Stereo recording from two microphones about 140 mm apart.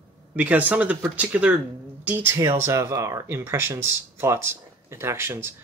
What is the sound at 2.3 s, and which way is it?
Speech, 20° right (ahead or behind).